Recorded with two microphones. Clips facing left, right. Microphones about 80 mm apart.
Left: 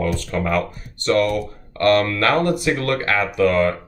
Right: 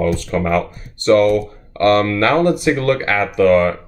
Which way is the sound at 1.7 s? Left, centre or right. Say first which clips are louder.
Right 3 dB; right.